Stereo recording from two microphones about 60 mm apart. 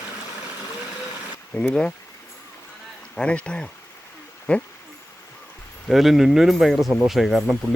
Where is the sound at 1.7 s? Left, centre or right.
Centre.